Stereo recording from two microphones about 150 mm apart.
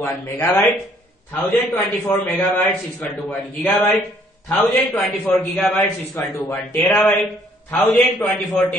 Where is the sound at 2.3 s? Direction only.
10° left (ahead or behind).